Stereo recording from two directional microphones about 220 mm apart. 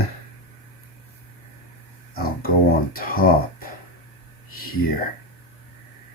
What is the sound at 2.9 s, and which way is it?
Speech, 40° left (ahead or behind).